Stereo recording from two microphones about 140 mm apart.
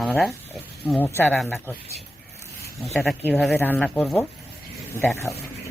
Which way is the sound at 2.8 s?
Centre (ahead or behind).